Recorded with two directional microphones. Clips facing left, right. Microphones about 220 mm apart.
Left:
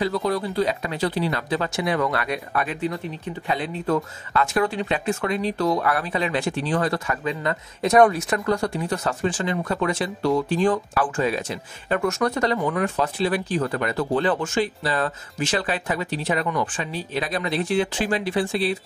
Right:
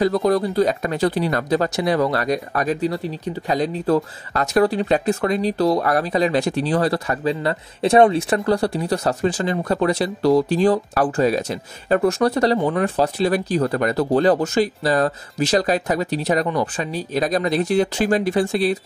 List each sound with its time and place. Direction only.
0.0 s speech: 45° right (ahead or behind)